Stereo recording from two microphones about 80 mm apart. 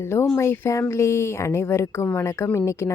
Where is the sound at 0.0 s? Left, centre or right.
Left.